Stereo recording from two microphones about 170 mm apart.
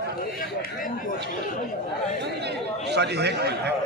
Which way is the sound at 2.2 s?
80° right.